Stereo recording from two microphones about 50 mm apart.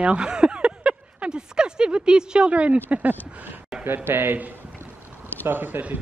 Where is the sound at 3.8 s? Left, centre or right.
Right.